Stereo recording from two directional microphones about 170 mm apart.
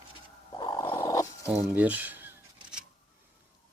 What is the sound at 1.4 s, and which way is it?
Speech, 10° right (ahead or behind).